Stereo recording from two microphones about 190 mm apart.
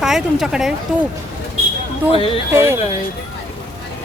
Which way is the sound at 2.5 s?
15° right (ahead or behind).